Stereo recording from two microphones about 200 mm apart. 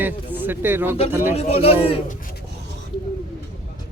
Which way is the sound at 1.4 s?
30° left (ahead or behind).